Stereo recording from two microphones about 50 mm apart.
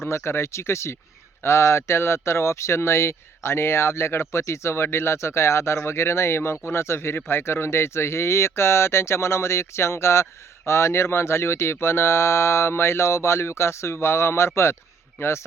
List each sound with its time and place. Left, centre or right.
0.1 s speech: left